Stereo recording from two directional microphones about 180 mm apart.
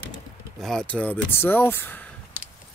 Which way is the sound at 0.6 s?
5° left (ahead or behind).